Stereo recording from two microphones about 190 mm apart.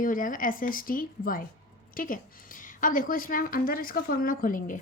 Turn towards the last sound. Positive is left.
turn(degrees=45)  # may be behind; listen again after turning